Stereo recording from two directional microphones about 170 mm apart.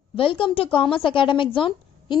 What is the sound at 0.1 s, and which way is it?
A woman's voice, 30° left (ahead or behind).